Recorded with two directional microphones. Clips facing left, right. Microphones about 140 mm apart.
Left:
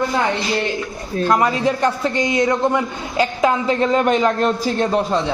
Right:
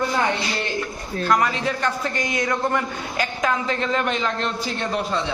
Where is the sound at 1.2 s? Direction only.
25° left (ahead or behind).